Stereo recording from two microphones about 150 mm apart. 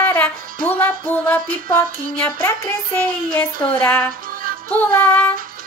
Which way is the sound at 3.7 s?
10° left (ahead or behind).